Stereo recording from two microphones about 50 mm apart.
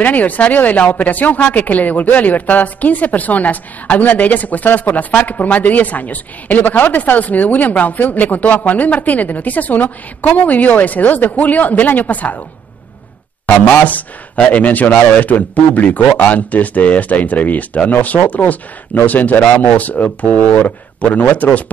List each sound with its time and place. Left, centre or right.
0.0 s speech: left
13.8 s speech: left